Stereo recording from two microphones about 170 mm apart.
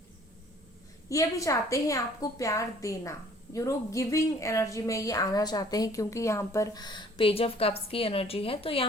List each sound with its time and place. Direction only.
1.1 s a woman's voice: 20° left (ahead or behind)